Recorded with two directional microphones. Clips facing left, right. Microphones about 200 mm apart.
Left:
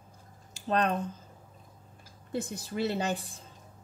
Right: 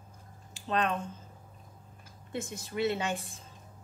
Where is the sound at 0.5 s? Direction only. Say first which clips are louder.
Left 2 dB; 40° left (ahead or behind).